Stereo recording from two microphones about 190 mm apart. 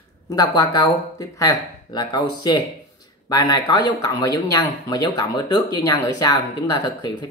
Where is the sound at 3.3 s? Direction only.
20° left (ahead or behind).